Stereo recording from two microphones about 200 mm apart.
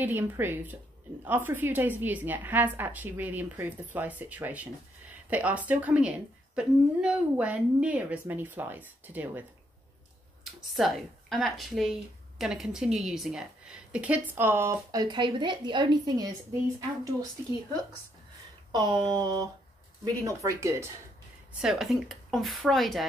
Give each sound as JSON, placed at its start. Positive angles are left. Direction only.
{"t": 0.0, "sound": "a woman's voice", "side_deg": -10}
{"t": 10.4, "sound": "speech", "side_deg": 0}
{"t": 18.7, "sound": "a woman's voice", "side_deg": -20}
{"t": 21.5, "sound": "speech", "side_deg": 0}